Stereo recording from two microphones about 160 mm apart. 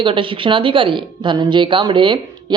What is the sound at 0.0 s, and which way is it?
Speech, 30° right (ahead or behind).